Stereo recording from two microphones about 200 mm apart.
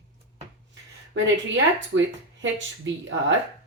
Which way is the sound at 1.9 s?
65° right (ahead or behind).